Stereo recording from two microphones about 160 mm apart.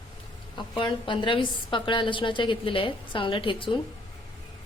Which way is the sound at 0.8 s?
30° left (ahead or behind).